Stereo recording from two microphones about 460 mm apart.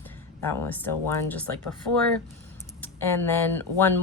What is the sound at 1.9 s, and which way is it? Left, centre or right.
Speech, left.